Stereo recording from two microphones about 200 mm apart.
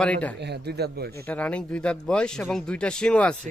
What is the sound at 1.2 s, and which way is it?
Speech, 5° left (ahead or behind).